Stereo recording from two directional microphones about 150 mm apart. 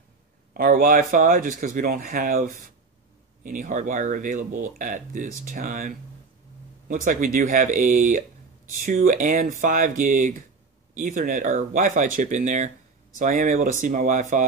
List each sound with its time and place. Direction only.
0.6 s speech: 70° right (ahead or behind)